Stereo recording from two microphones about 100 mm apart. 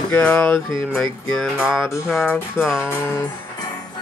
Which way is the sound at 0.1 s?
10° left (ahead or behind).